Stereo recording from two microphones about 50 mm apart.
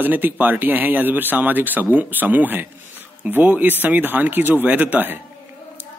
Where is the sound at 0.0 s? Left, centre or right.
Right.